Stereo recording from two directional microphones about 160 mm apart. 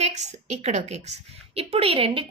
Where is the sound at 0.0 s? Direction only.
45° right (ahead or behind).